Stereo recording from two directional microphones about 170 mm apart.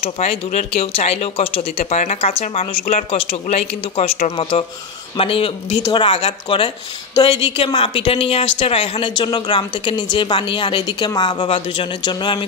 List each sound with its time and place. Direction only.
0.0 s a woman's voice: 40° left (ahead or behind)